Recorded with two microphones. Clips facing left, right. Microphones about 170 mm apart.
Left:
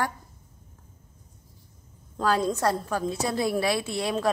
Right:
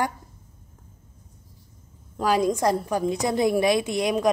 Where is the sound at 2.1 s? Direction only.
10° right (ahead or behind).